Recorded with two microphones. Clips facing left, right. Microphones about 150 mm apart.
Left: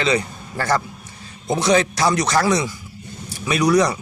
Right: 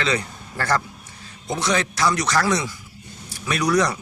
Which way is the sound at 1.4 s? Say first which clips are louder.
Left 6 dB; 25° left (ahead or behind).